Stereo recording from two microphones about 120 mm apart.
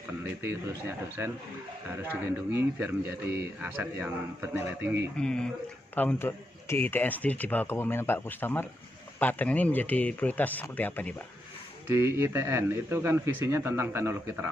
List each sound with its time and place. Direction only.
0.2 s a man's voice: 20° right (ahead or behind)
2.5 s a man's voice: 15° right (ahead or behind)
5.1 s a man's voice: 5° left (ahead or behind)
5.9 s a man's voice: 15° left (ahead or behind)
11.9 s a man's voice: 20° right (ahead or behind)